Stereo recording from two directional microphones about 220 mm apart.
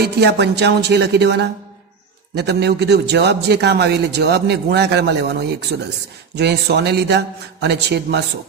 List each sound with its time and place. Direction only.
0.0 s a man's voice: 50° right (ahead or behind)